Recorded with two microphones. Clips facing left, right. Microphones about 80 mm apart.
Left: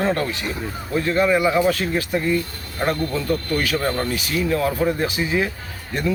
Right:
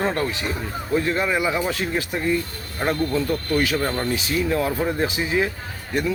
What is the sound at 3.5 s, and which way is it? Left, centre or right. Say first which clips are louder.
Speech: right 5 dB; right.